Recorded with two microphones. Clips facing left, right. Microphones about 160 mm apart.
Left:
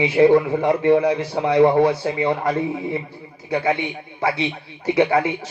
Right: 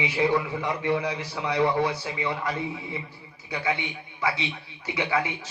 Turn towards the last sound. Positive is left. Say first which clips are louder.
# left 10 dB
turn(degrees=55)  # may be behind; listen again after turning